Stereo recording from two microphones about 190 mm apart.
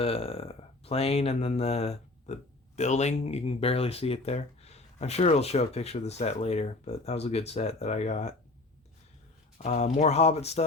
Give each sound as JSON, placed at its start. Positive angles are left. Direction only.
{"t": 0.0, "sound": "speech", "side_deg": 30}
{"t": 9.6, "sound": "speech", "side_deg": 35}